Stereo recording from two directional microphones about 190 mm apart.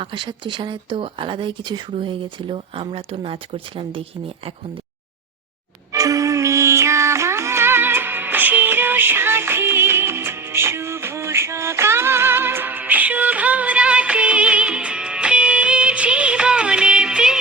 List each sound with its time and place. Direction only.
0.0 s speech: 25° right (ahead or behind)
5.9 s music: 20° right (ahead or behind)